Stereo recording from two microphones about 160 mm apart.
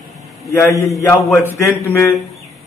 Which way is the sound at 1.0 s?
15° left (ahead or behind).